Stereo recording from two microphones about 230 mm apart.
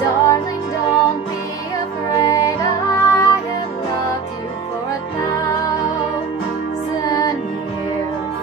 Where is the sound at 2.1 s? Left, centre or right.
Centre.